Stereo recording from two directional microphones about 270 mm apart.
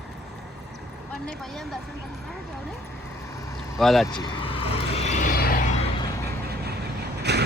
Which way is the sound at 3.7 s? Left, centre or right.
Centre.